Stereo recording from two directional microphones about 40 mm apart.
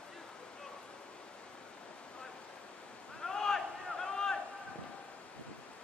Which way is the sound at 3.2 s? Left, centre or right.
Centre.